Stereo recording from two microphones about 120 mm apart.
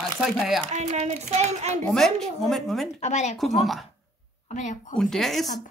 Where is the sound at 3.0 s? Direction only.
75° left (ahead or behind).